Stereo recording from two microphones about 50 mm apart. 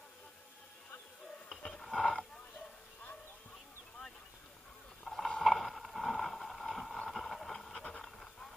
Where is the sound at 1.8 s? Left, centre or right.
Centre.